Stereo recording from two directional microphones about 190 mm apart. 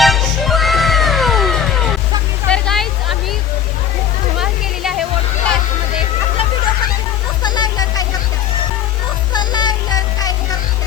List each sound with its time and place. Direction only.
0.0 s music: centre (ahead or behind)
2.5 s a sound: centre (ahead or behind)
4.4 s music: centre (ahead or behind)
7.4 s music: 20° left (ahead or behind)
9.3 s music: 20° left (ahead or behind)